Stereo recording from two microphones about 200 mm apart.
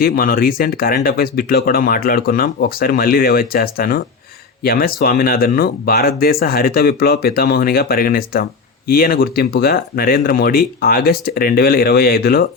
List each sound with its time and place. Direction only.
0.0 s speech: 45° left (ahead or behind)